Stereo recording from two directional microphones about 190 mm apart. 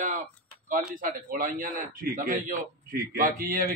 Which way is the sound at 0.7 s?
45° right (ahead or behind).